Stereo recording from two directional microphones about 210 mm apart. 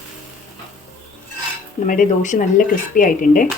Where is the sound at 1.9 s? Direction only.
40° left (ahead or behind).